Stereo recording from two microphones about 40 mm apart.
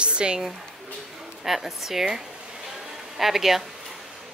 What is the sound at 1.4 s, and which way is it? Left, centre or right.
Speech, centre.